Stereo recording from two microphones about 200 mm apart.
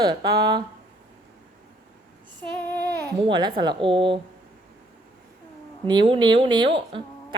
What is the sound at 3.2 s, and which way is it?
Speech, 20° right (ahead or behind).